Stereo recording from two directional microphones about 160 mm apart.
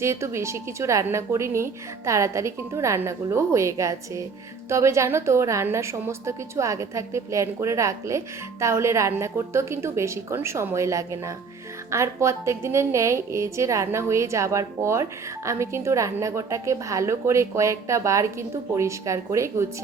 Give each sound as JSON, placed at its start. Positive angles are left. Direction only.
{"t": 0.0, "sound": "a woman's voice", "side_deg": -15}